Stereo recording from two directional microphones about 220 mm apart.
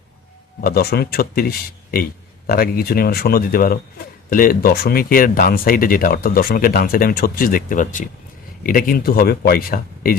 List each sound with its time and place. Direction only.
0.6 s speech: 45° left (ahead or behind)